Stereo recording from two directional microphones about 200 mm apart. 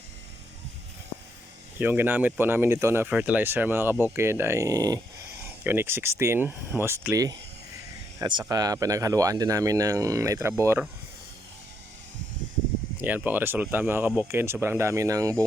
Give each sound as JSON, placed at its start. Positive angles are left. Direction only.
{"t": 1.8, "sound": "speech", "side_deg": -10}
{"t": 13.0, "sound": "speech", "side_deg": -10}